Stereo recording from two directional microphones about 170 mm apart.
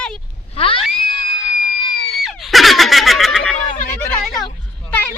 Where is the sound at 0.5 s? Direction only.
35° left (ahead or behind).